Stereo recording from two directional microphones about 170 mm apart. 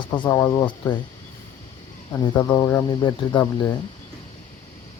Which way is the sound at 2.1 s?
25° left (ahead or behind).